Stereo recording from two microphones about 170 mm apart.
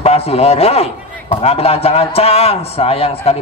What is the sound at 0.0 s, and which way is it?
A man's voice, 35° left (ahead or behind).